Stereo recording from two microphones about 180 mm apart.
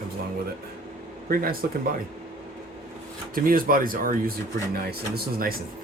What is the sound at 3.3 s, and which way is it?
Speech, 50° right (ahead or behind).